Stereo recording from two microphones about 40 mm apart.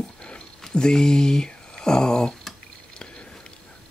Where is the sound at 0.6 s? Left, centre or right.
Centre.